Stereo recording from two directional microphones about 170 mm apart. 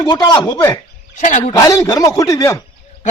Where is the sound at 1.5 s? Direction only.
20° left (ahead or behind).